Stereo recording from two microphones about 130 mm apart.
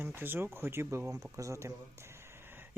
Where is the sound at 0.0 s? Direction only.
15° right (ahead or behind).